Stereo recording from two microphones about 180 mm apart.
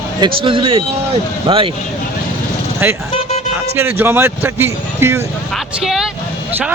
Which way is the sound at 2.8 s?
10° right (ahead or behind).